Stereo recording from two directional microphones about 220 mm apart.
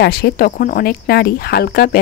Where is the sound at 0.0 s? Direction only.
45° left (ahead or behind).